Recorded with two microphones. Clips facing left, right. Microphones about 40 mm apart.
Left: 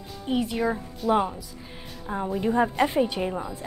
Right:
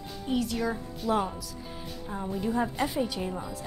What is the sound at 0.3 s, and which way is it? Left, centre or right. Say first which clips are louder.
Speech: left 4 dB; left.